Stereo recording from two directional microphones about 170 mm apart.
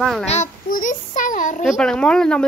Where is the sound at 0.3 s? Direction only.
50° left (ahead or behind).